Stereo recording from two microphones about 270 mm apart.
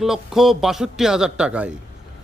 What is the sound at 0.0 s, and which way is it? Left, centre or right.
Speech, centre.